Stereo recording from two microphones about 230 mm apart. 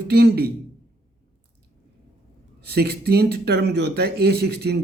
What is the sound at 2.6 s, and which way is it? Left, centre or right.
Speech, right.